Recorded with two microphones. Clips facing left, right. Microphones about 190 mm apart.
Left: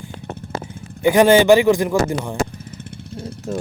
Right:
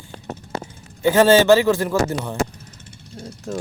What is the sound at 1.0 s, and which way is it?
Speech, 15° left (ahead or behind).